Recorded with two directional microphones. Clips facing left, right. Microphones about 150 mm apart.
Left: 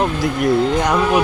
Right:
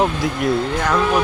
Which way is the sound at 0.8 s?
15° left (ahead or behind).